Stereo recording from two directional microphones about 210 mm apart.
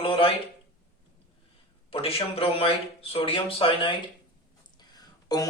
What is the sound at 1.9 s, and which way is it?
A man's voice, 25° left (ahead or behind).